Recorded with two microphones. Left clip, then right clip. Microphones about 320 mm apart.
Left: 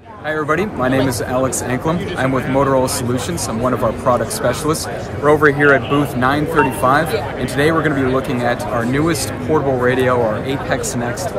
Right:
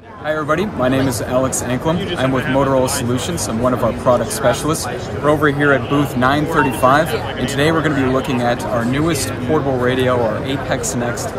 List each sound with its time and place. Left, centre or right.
0.3 s speech: centre